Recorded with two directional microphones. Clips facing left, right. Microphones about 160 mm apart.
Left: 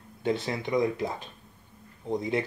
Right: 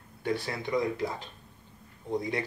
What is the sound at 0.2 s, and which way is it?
Speech, 20° left (ahead or behind).